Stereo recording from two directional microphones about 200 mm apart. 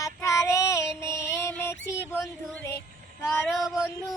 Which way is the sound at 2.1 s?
10° left (ahead or behind).